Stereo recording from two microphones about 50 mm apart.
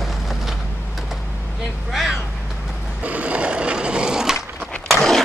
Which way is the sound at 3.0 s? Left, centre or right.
Right.